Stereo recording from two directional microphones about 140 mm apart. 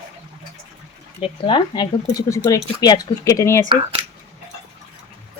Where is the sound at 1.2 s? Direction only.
35° left (ahead or behind).